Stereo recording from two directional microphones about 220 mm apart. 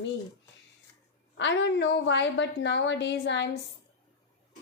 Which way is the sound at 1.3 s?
55° left (ahead or behind).